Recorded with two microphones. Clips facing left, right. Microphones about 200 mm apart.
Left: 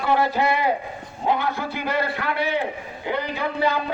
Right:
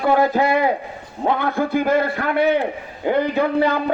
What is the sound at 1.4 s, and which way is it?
A man's voice, 50° right (ahead or behind).